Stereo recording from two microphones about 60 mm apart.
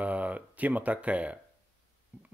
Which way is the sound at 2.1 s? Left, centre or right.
Right.